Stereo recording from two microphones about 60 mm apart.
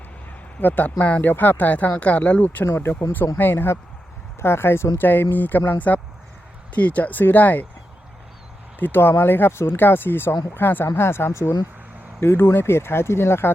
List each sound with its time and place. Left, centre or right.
0.6 s speech: left
2.7 s speech: left
8.8 s speech: left
11.3 s speech: left
12.2 s speech: left